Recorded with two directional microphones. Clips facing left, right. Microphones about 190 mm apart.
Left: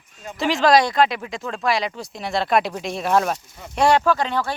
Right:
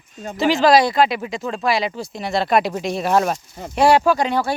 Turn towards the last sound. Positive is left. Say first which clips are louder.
# right 3 dB
turn(degrees=-10)  # may be behind; listen again after turning